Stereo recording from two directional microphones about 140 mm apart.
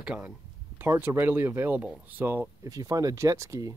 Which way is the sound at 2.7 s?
25° right (ahead or behind).